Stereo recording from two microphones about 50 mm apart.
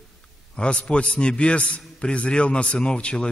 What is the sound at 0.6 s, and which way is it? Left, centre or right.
A man's voice, left.